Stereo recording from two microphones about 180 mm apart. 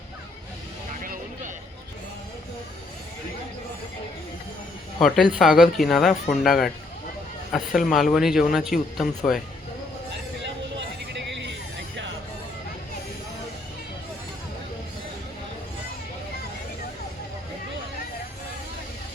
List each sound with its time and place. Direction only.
4.9 s speech: centre (ahead or behind)
10.8 s sheep: 80° right